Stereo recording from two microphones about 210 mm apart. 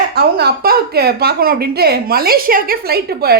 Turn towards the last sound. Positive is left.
turn(degrees=-50)  # may be behind; listen again after turning